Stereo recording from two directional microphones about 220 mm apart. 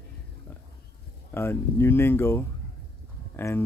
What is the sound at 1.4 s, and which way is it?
Speech, 10° left (ahead or behind).